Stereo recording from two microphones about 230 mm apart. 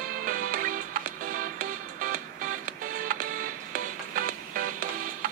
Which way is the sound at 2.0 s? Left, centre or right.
Right.